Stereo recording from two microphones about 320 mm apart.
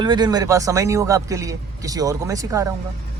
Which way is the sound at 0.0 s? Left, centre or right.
Centre.